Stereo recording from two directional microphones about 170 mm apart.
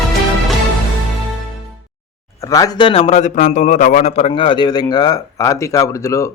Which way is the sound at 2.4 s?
20° left (ahead or behind).